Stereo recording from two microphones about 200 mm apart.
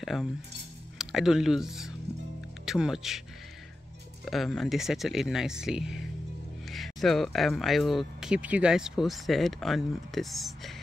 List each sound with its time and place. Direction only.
0.0 s cutlery: centre (ahead or behind)
0.9 s speech: centre (ahead or behind)
4.2 s speech: centre (ahead or behind)